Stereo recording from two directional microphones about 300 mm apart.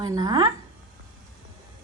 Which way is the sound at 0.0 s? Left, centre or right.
Centre.